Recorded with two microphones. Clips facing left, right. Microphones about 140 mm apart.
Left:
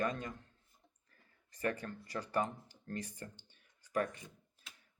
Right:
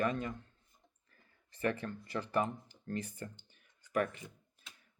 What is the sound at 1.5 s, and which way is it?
Speech, 30° right (ahead or behind).